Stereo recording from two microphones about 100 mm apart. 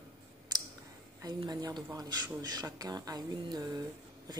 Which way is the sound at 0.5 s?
45° right (ahead or behind).